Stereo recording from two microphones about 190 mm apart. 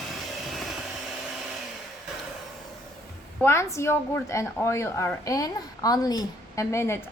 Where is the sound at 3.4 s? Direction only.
15° left (ahead or behind).